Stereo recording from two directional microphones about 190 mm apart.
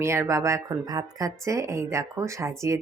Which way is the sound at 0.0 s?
15° right (ahead or behind).